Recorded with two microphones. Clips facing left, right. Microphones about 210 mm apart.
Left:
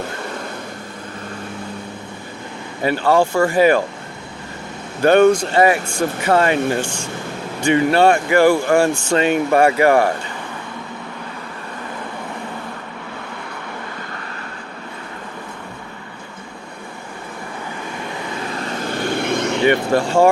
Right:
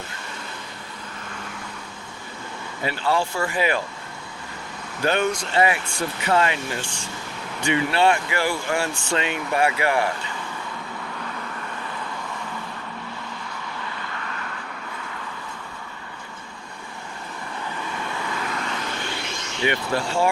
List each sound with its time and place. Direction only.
2.8 s speech: 50° left (ahead or behind)
5.0 s speech: 50° left (ahead or behind)
18.3 s vehicle: 30° left (ahead or behind); by 20.3 s 50° left (ahead or behind)